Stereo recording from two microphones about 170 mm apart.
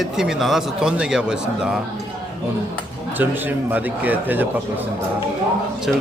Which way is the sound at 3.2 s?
10° right (ahead or behind).